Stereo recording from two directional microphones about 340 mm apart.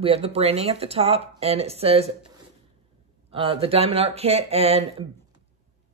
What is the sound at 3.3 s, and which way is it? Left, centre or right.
Speech, centre.